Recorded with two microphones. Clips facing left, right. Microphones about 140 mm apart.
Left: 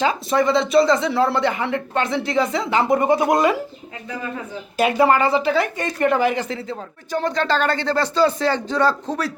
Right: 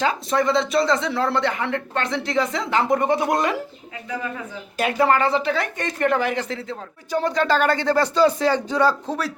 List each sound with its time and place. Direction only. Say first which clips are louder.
0.0 s speech: left 2 dB; centre (ahead or behind)
4.8 s speech: left 3 dB; 10° left (ahead or behind)
7.1 s speech: right 1 dB; 10° right (ahead or behind)